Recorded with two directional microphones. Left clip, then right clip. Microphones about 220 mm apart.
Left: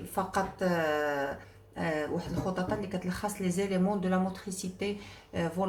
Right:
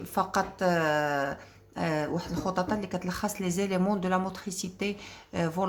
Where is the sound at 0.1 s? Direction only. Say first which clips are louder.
Right 3 dB; 45° right (ahead or behind).